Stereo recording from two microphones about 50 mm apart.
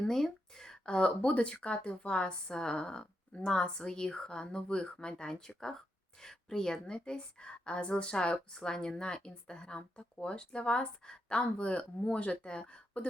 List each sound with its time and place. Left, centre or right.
0.1 s a woman's voice: centre